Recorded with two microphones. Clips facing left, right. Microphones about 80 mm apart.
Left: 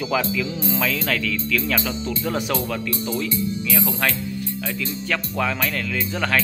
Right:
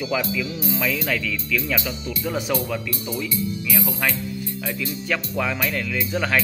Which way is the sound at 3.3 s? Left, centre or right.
Left.